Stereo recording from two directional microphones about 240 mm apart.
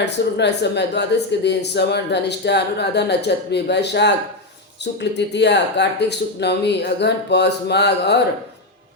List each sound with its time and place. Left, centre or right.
0.0 s speech: left